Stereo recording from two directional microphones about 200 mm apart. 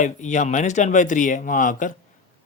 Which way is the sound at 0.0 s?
35° left (ahead or behind).